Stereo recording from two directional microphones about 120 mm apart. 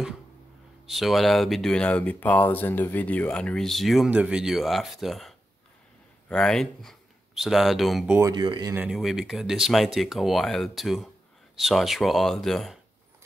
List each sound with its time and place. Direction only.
0.8 s speech: centre (ahead or behind)
8.4 s speech: 40° right (ahead or behind)
8.9 s speech: 5° right (ahead or behind)